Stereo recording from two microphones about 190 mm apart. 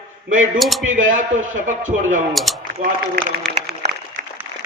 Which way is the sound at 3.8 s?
45° right (ahead or behind).